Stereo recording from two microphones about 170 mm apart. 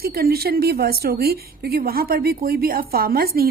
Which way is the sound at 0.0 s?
65° right (ahead or behind).